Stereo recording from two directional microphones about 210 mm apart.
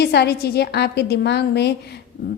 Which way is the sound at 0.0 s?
50° left (ahead or behind).